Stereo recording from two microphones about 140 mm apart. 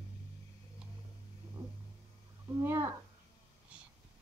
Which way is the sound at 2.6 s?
15° right (ahead or behind).